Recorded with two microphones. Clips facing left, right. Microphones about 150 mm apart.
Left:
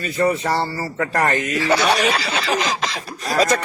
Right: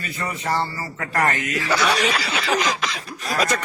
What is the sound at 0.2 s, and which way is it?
Speech, 35° left (ahead or behind).